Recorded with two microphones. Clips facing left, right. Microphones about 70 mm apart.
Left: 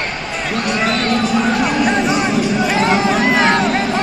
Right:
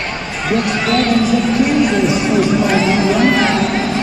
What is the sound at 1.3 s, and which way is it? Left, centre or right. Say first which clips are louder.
Music: right 2 dB; left.